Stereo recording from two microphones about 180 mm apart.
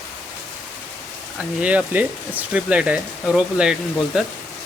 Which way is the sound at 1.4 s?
5° right (ahead or behind).